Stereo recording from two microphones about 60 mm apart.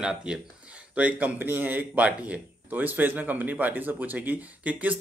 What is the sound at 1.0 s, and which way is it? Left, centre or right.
Speech, right.